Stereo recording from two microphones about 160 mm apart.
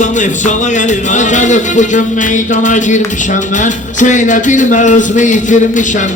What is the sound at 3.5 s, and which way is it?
Speech, 50° left (ahead or behind).